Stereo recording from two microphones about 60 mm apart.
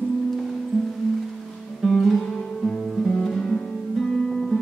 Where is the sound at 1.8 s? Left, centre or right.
Centre.